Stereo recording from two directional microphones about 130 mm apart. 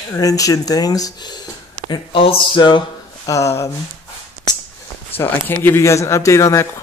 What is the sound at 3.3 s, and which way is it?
Speech, 25° left (ahead or behind).